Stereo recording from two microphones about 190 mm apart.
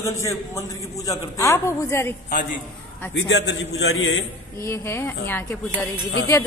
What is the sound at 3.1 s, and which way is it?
A man's voice, 65° left (ahead or behind).